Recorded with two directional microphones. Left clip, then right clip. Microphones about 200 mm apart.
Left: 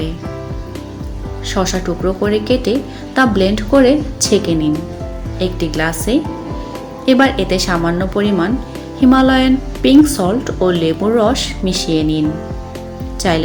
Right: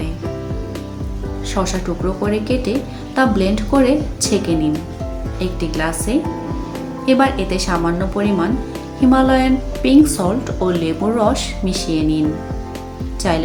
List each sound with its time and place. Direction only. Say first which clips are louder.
1.5 s a woman's voice: left 4 dB; 15° left (ahead or behind)
13.2 s a woman's voice: left 3 dB; 15° left (ahead or behind)